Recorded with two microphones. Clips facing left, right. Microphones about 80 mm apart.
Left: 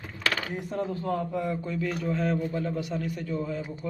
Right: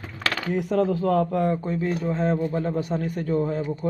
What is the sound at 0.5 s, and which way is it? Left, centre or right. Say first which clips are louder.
Speech: right 9 dB; right.